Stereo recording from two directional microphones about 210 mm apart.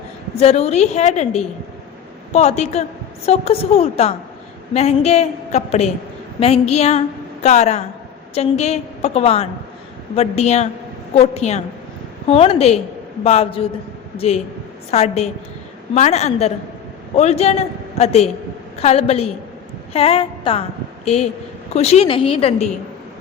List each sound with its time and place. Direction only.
0.3 s a woman's voice: 30° left (ahead or behind)